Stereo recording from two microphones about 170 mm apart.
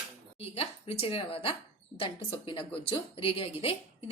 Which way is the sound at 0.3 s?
35° left (ahead or behind).